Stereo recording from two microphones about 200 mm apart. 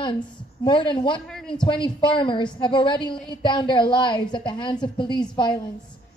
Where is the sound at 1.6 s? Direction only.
25° left (ahead or behind).